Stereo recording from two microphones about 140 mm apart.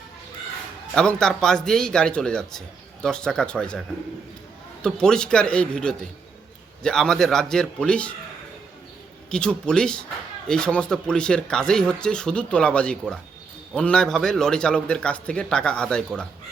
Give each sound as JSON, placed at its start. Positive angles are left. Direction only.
{"t": 0.9, "sound": "a man's voice", "side_deg": 5}
{"t": 9.3, "sound": "a man's voice", "side_deg": 5}